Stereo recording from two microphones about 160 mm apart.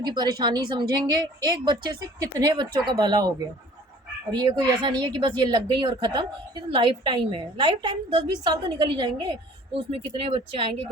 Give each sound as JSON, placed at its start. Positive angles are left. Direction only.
{"t": 0.0, "sound": "a woman's voice", "side_deg": -25}